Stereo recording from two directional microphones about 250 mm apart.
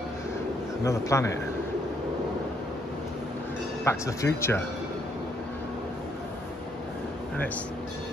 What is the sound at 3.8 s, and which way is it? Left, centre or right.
Speech, centre.